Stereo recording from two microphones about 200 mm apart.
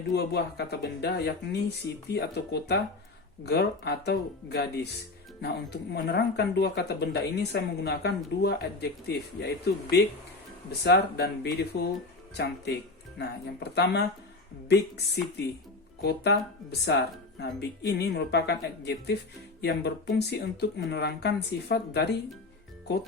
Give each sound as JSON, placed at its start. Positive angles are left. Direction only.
{"t": 0.1, "sound": "speech", "side_deg": 55}